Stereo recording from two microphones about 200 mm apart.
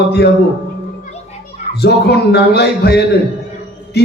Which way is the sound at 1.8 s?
55° left (ahead or behind).